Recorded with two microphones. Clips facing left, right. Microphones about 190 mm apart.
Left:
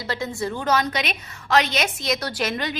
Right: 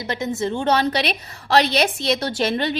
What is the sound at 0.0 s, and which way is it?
A woman's voice, 20° right (ahead or behind).